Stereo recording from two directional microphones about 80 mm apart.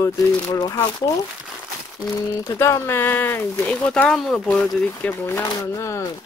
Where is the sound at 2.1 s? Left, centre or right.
Left.